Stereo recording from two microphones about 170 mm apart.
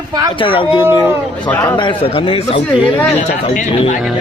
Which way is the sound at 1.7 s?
30° left (ahead or behind).